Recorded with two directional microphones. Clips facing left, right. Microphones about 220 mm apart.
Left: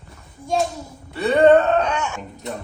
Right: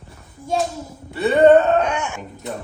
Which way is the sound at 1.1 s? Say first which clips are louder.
Right 1 dB; 5° right (ahead or behind).